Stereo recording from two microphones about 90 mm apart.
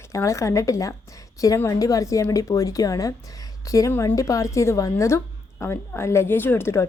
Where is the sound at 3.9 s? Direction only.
25° left (ahead or behind).